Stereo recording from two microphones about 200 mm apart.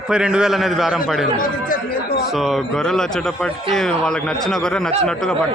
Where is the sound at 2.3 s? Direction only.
Centre (ahead or behind).